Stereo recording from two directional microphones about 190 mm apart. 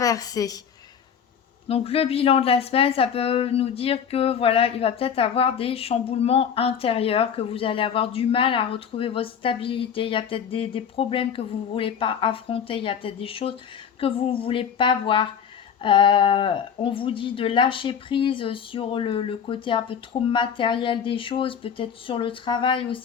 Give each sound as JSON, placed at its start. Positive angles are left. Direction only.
{"t": 0.0, "sound": "a woman's voice", "side_deg": 20}
{"t": 1.6, "sound": "a woman's voice", "side_deg": 30}